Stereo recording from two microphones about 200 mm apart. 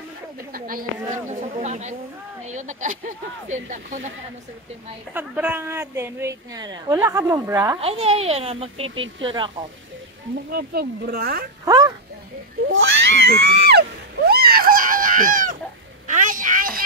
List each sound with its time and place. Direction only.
0.5 s a sound: 45° right (ahead or behind)
1.1 s speech: 40° right (ahead or behind)
5.1 s a woman's voice: 10° right (ahead or behind)
7.8 s speech: 30° right (ahead or behind)
8.8 s speech: 75° right (ahead or behind)
10.5 s speech: 50° right (ahead or behind)
11.6 s a sound: 15° right (ahead or behind)
12.6 s screaming: 80° right; by 15.5 s 40° right (ahead or behind)
16.1 s a sound: 40° right (ahead or behind)